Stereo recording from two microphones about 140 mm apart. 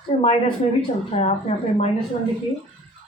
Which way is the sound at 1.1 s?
50° left (ahead or behind).